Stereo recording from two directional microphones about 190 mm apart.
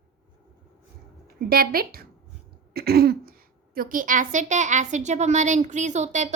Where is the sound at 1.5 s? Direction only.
50° right (ahead or behind).